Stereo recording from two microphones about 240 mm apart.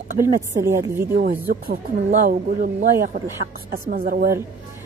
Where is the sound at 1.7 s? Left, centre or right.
Right.